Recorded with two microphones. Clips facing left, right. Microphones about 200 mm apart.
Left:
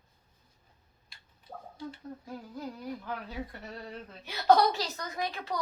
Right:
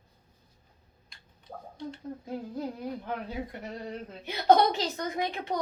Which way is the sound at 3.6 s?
20° right (ahead or behind).